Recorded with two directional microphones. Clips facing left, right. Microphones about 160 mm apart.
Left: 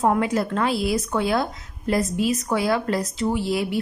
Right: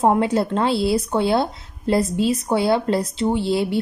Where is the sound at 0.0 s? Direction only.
30° right (ahead or behind).